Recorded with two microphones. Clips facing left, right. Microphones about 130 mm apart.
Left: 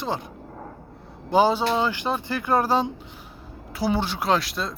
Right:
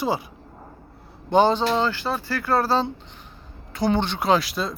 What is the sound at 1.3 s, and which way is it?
Speech, 5° left (ahead or behind).